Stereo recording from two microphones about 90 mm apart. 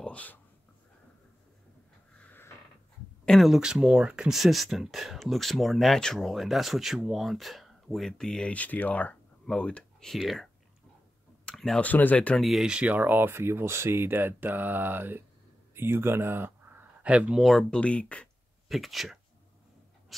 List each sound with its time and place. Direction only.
0.0 s a sound: 15° left (ahead or behind)
2.2 s a sound: 25° left (ahead or behind)
3.3 s speech: centre (ahead or behind)
11.4 s clicking: 5° left (ahead or behind)
11.8 s speech: 20° left (ahead or behind)
12.4 s speech: centre (ahead or behind); by 16.8 s 25° right (ahead or behind)
17.0 s speech: 10° right (ahead or behind)
17.4 s speech: centre (ahead or behind)
17.6 s speech: 15° left (ahead or behind)
18.7 s speech: centre (ahead or behind)
20.1 s a sound: centre (ahead or behind)